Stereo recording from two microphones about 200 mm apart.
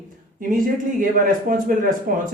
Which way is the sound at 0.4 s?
40° right (ahead or behind).